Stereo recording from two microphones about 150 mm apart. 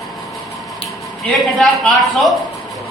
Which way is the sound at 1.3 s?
Centre (ahead or behind).